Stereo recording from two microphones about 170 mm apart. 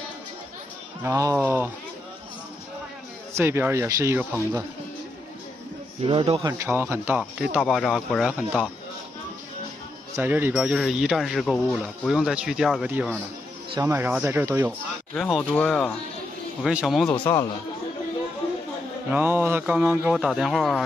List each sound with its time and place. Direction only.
1.0 s a man's voice: 15° right (ahead or behind)
3.3 s a man's voice: 15° right (ahead or behind)
6.0 s speech: 35° right (ahead or behind)
6.4 s a man's voice: 15° right (ahead or behind)
7.5 s speech: centre (ahead or behind)
10.1 s speech: 10° right (ahead or behind)
13.7 s a man's voice: 15° right (ahead or behind)
15.1 s speech: 5° left (ahead or behind)
19.0 s a man's voice: 10° right (ahead or behind)